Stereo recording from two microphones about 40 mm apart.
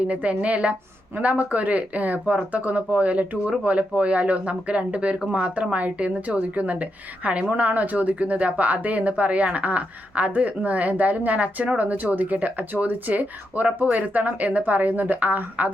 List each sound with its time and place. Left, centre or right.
0.1 s speech: right